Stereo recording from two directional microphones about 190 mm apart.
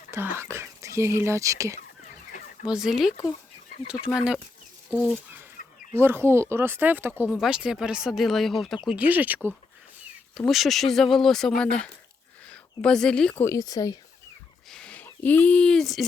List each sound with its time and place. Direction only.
0.1 s speech: 10° right (ahead or behind)
2.6 s speech: 5° right (ahead or behind)
4.9 s speech: 10° right (ahead or behind); by 14.0 s 20° left (ahead or behind)
14.7 s speech: 5° left (ahead or behind)